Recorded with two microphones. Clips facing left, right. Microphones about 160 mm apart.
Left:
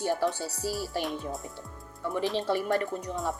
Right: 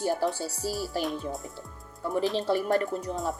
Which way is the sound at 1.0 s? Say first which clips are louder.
Right 2 dB; centre (ahead or behind).